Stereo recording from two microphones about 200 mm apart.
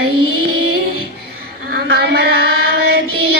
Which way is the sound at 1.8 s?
55° right (ahead or behind).